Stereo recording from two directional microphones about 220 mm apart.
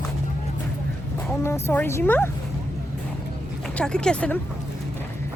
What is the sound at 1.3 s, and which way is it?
A woman's voice, 10° left (ahead or behind).